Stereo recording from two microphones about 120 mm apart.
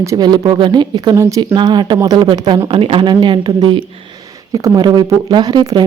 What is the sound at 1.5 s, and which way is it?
Speech, 40° right (ahead or behind).